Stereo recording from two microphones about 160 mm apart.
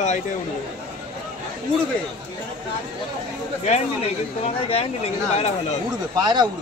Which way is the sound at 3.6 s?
40° left (ahead or behind).